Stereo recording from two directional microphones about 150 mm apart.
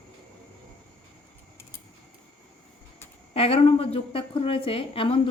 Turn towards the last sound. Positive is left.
turn(degrees=40)  # may be behind; listen again after turning